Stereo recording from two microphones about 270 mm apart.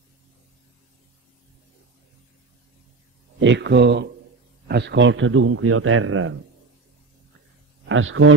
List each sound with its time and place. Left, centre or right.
3.3 s speech: right
7.9 s speech: right